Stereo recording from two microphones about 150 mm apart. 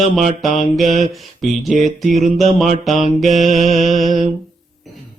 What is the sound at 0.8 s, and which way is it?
Mantra, 50° right (ahead or behind).